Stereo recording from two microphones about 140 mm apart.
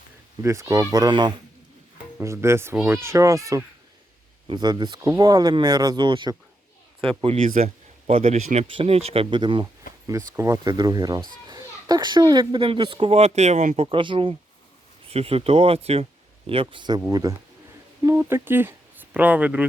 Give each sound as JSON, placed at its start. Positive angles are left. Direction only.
{"t": 0.4, "sound": "a child's voice", "side_deg": -20}
{"t": 7.6, "sound": "speech", "side_deg": -55}
{"t": 8.6, "sound": "a child's voice", "side_deg": -45}
{"t": 10.1, "sound": "a child's voice", "side_deg": -25}
{"t": 13.8, "sound": "a child's voice", "side_deg": -35}